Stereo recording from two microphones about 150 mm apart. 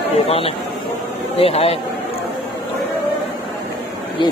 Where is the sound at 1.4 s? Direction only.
40° left (ahead or behind).